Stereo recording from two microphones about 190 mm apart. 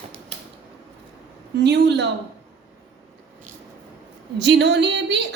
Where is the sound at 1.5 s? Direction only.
65° right (ahead or behind).